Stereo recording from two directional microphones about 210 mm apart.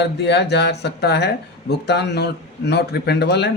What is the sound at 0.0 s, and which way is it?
A man's voice, 55° left (ahead or behind).